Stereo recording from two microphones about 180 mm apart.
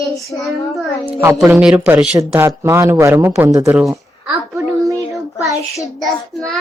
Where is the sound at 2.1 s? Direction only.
15° right (ahead or behind).